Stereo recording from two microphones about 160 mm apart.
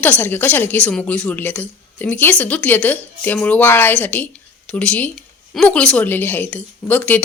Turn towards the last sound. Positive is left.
turn(degrees=10)  # may be behind; listen again after turning